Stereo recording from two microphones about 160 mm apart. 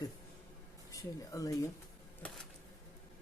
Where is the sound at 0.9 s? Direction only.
20° left (ahead or behind).